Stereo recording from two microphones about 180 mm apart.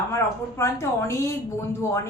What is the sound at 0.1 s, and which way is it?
Speech, 15° left (ahead or behind).